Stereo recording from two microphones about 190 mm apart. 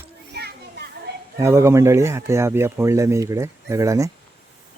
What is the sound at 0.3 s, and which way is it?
Children playing, 60° right (ahead or behind).